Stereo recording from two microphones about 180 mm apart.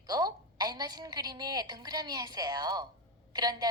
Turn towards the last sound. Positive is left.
turn(degrees=-20)  # may be behind; listen again after turning